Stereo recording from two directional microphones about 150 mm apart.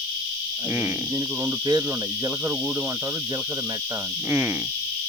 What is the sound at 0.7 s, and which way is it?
Speech, 10° right (ahead or behind).